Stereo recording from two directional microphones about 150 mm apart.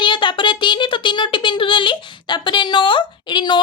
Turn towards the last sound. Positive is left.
turn(degrees=30)  # may be behind; listen again after turning